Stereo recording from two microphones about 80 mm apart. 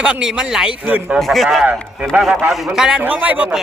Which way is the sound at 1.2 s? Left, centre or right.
Centre.